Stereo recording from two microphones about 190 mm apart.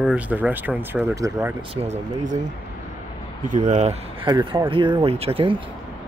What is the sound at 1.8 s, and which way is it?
Speech, 35° right (ahead or behind).